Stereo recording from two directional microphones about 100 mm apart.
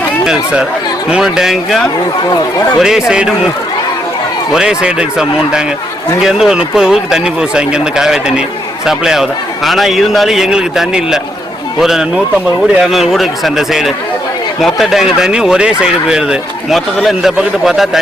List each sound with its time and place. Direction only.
0.3 s speech: 5° right (ahead or behind)
2.8 s speech: 5° right (ahead or behind)
4.5 s speech: 10° right (ahead or behind)